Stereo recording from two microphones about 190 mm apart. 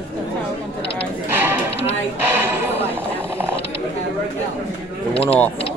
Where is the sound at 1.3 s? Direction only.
10° right (ahead or behind).